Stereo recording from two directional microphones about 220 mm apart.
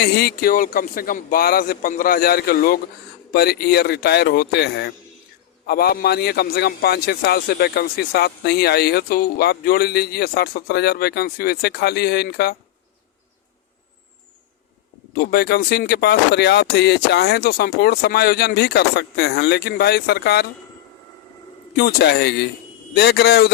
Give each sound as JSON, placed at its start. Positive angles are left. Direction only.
{"t": 0.0, "sound": "a man's voice", "side_deg": 50}
{"t": 15.1, "sound": "a man's voice", "side_deg": 45}
{"t": 21.8, "sound": "a man's voice", "side_deg": 45}